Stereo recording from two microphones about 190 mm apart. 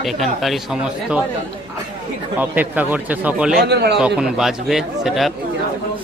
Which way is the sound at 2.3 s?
10° right (ahead or behind).